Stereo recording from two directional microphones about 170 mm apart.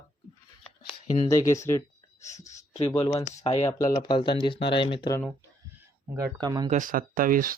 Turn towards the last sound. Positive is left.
turn(degrees=-55)  # may be behind; listen again after turning